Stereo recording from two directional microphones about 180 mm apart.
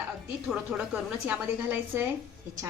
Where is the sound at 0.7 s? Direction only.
10° right (ahead or behind).